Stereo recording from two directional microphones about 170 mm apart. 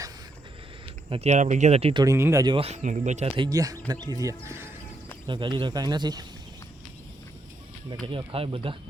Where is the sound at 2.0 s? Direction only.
15° right (ahead or behind).